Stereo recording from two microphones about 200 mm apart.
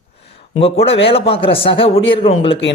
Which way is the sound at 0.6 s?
30° left (ahead or behind).